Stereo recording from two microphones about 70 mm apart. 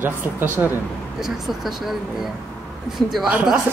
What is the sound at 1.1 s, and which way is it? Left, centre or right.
A woman's voice, centre.